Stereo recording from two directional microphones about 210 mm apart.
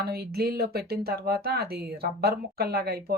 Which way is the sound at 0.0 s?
50° right (ahead or behind).